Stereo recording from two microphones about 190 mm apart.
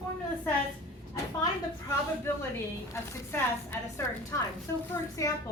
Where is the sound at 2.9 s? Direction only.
15° left (ahead or behind).